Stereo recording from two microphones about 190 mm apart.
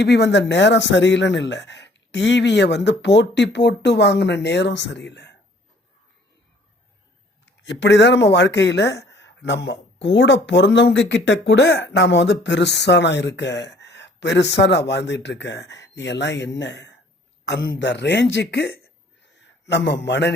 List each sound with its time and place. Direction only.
0.0 s speech: 60° left (ahead or behind)
7.4 s speech: 70° left (ahead or behind)
19.2 s a sound: 65° left (ahead or behind)